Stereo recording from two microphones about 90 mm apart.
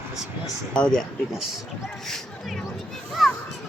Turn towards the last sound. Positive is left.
turn(degrees=0)  # may be behind; listen again after turning